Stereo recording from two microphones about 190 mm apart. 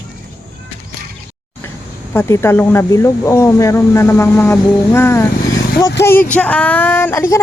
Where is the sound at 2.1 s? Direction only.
15° left (ahead or behind).